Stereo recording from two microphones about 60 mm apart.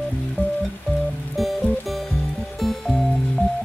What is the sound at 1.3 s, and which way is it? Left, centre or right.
Music, centre.